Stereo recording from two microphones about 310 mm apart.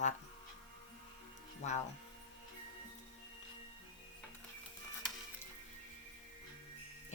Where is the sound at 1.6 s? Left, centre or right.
Left.